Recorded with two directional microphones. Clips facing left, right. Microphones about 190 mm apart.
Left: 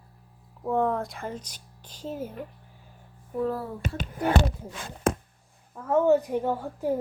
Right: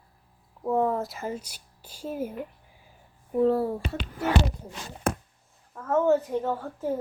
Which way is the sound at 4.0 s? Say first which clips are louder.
Left 2 dB; 50° left (ahead or behind).